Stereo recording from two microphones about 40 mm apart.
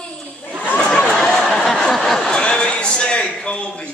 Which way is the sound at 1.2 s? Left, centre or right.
Centre.